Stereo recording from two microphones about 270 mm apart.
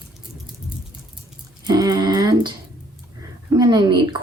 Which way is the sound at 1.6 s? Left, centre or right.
Centre.